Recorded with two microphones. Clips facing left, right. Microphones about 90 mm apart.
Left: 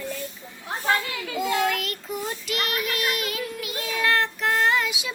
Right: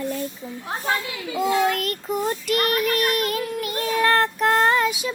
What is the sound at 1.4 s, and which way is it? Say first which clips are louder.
Child singing: right 4 dB; 45° right (ahead or behind).